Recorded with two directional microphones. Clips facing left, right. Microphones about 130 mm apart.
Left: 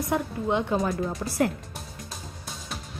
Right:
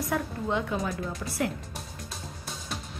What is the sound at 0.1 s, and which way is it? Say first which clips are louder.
Speech: left 4 dB; 20° left (ahead or behind).